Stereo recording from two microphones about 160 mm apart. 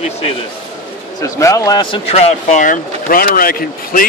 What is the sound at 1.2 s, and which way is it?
Speech, 20° left (ahead or behind).